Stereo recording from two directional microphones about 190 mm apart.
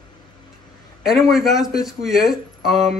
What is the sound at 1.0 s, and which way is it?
Speech, centre (ahead or behind).